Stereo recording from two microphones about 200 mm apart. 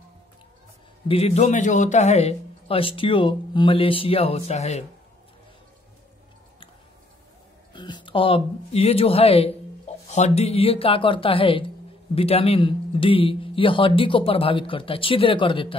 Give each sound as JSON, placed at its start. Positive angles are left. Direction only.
{"t": 1.0, "sound": "a man's voice", "side_deg": 30}
{"t": 7.7, "sound": "speech", "side_deg": 20}